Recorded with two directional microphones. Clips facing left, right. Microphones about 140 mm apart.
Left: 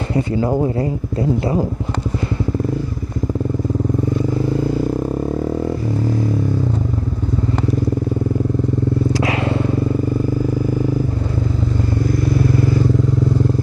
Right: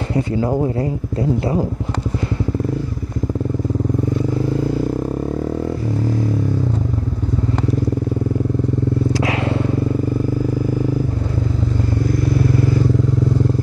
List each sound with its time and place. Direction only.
0.1 s speech: 15° left (ahead or behind)
9.1 s vehicle: 10° left (ahead or behind)